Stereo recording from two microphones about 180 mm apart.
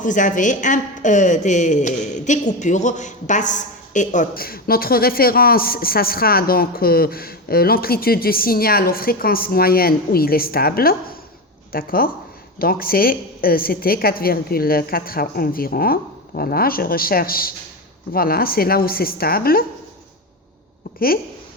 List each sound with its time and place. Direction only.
0.0 s a woman's voice: 45° left (ahead or behind)